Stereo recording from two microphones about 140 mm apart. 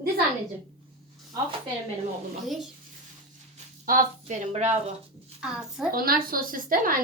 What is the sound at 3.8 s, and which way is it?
Speech, 75° right (ahead or behind).